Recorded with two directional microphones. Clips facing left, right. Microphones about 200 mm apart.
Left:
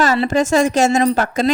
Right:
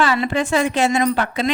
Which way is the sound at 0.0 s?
40° left (ahead or behind).